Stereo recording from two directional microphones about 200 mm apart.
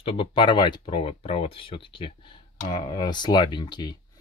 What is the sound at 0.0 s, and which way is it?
Speech, 25° left (ahead or behind).